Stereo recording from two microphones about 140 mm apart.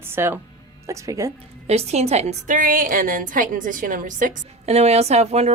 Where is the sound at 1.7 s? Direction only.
50° right (ahead or behind); by 4.3 s 70° right (ahead or behind).